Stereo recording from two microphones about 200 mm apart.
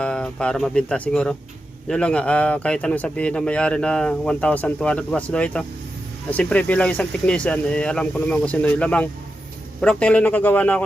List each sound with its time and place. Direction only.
0.0 s speech: 5° left (ahead or behind)